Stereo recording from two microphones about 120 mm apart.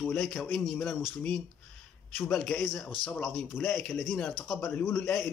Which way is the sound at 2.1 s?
10° left (ahead or behind).